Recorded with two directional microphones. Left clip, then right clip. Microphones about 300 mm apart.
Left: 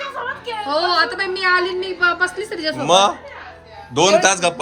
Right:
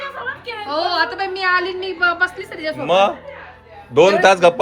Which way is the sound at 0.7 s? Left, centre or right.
Left.